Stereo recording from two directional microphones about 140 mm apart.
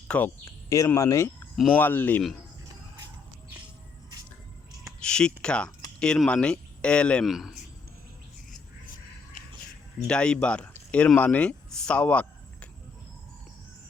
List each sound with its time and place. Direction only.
0.1 s speech: 10° left (ahead or behind)
0.9 s speech: 20° left (ahead or behind)
1.5 s speech: 10° left (ahead or behind)
4.8 s a sound: 5° left (ahead or behind)
6.0 s speech: 5° left (ahead or behind)
10.1 s speech: 5° left (ahead or behind)